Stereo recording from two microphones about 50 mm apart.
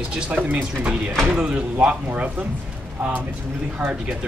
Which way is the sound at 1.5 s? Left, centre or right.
Right.